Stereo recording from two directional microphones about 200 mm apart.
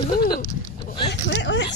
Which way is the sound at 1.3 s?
65° left (ahead or behind).